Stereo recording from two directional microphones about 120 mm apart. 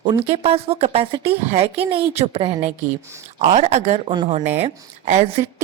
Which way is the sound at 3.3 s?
70° right (ahead or behind).